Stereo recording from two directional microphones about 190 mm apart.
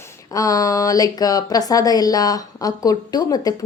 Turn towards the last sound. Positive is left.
turn(degrees=20)  # may be behind; listen again after turning